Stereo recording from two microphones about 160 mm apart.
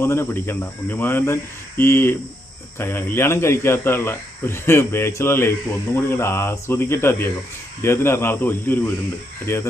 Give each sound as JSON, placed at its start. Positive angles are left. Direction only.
{"t": 0.0, "sound": "speech", "side_deg": 15}